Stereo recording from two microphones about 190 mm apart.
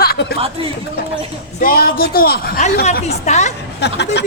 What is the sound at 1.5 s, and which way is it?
Speech, 50° left (ahead or behind).